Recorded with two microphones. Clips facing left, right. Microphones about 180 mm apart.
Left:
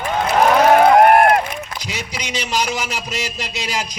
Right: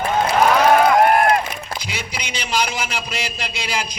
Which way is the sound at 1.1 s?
55° left (ahead or behind).